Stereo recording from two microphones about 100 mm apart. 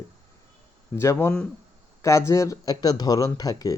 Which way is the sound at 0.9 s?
25° left (ahead or behind).